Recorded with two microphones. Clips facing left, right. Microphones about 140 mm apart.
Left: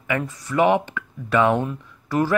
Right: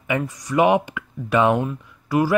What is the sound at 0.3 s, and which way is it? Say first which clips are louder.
Speech: right 1 dB; 15° right (ahead or behind).